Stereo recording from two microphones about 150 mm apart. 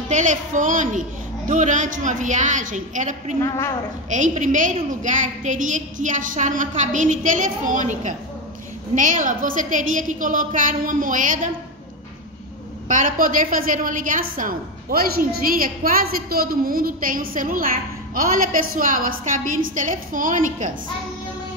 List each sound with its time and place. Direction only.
0.1 s a woman's voice: 55° right (ahead or behind)
3.3 s a woman's voice: 15° left (ahead or behind)
4.1 s a woman's voice: 55° right (ahead or behind)
12.8 s a woman's voice: 60° right (ahead or behind)